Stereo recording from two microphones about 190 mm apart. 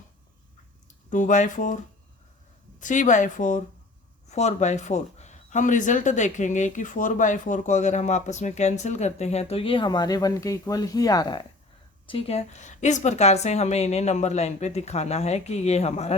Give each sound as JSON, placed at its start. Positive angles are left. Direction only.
{"t": 1.1, "sound": "speech", "side_deg": 40}